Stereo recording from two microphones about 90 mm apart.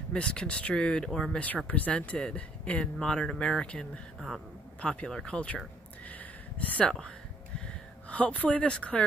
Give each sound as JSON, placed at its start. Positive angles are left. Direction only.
{"t": 0.1, "sound": "speech", "side_deg": 10}
{"t": 6.0, "sound": "a sound", "side_deg": 15}
{"t": 7.6, "sound": "speech", "side_deg": 15}